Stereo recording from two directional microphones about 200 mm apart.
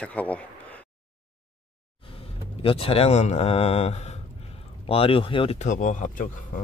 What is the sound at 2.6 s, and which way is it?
Speech, 30° left (ahead or behind).